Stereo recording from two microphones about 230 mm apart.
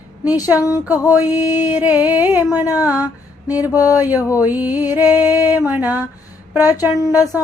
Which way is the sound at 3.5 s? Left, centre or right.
Centre.